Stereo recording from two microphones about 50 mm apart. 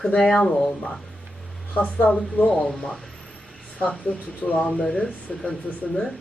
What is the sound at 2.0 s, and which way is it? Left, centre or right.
Speech, left.